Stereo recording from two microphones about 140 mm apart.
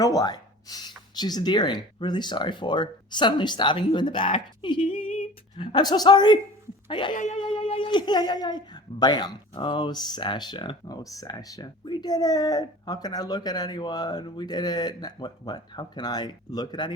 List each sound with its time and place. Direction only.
0.0 s speech: 25° left (ahead or behind)
7.1 s speech: 60° left (ahead or behind); by 16.9 s 30° left (ahead or behind)